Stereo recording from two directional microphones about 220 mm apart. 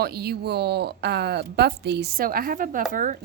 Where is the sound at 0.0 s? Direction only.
45° right (ahead or behind).